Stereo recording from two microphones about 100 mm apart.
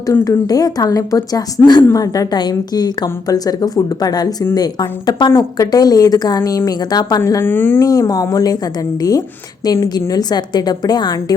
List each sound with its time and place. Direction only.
0.1 s a woman's voice: 35° left (ahead or behind)
5.3 s a woman's voice: 30° left (ahead or behind)
7.4 s speech: 20° left (ahead or behind)
7.8 s a woman's voice: 35° left (ahead or behind)